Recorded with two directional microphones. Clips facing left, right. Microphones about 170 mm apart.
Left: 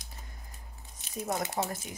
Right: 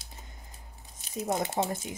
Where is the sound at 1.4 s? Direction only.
25° right (ahead or behind).